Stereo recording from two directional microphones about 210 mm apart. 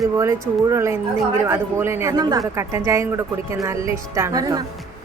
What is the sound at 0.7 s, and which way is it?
A woman's voice, 15° right (ahead or behind).